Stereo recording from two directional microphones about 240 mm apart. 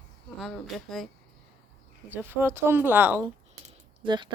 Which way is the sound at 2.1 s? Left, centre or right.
Centre.